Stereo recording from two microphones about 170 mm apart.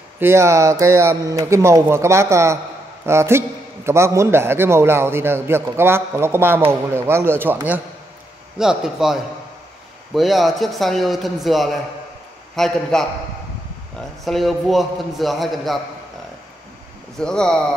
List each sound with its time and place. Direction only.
0.2 s a man's voice: 15° right (ahead or behind)
8.5 s a man's voice: 5° right (ahead or behind)
14.2 s a man's voice: centre (ahead or behind)
17.2 s a man's voice: 5° left (ahead or behind)